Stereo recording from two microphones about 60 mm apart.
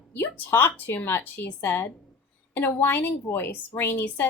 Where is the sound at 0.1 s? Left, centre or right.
Left.